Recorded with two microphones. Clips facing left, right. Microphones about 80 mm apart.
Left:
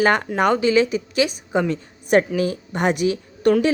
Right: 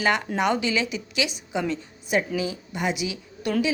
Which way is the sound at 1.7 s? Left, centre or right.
Left.